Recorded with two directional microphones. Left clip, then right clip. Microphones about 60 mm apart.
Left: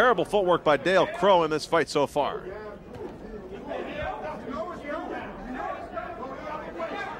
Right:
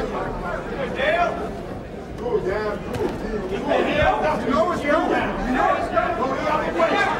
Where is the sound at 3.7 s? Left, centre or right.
Right.